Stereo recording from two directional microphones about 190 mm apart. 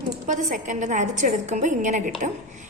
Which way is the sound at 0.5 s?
40° right (ahead or behind).